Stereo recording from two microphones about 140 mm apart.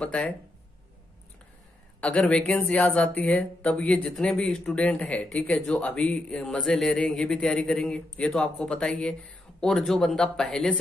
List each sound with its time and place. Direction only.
0.0 s speech: 10° left (ahead or behind)
2.0 s speech: 10° left (ahead or behind)